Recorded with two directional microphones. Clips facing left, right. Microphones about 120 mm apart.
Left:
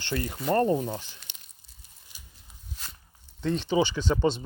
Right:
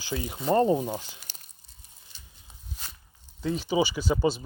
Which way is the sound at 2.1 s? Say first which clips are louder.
Left 1 dB; 15° left (ahead or behind).